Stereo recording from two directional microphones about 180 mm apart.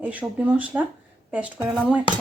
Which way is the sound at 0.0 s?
10° right (ahead or behind).